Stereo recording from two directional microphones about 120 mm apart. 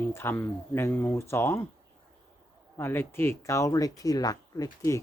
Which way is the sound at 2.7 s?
20° left (ahead or behind).